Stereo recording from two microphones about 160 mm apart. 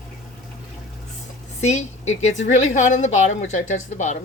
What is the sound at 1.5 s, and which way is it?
A woman's voice, 45° left (ahead or behind).